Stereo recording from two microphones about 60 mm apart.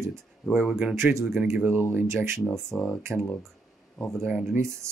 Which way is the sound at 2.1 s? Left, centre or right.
Right.